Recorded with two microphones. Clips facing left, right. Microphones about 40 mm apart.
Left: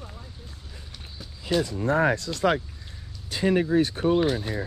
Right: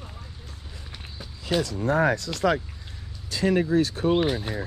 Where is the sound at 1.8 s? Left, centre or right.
Left.